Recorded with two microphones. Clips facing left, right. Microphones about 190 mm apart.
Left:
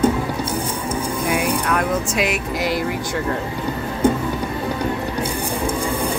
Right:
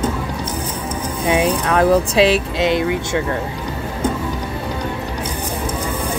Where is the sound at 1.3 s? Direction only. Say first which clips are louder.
Right 5 dB; 30° right (ahead or behind).